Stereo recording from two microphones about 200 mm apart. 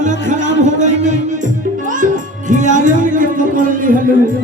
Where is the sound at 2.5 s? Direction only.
40° right (ahead or behind).